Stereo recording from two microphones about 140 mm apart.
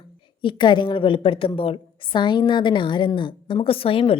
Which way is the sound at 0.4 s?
35° left (ahead or behind).